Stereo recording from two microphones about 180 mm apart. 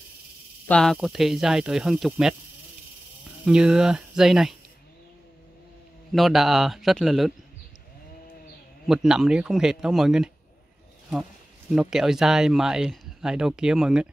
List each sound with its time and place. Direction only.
0.7 s speech: 5° left (ahead or behind)
3.4 s speech: 5° right (ahead or behind)
6.1 s speech: centre (ahead or behind)
8.8 s speech: centre (ahead or behind)
11.7 s speech: 5° right (ahead or behind)